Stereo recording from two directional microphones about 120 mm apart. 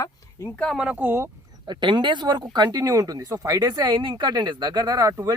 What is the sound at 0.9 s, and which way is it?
Speech, 15° right (ahead or behind).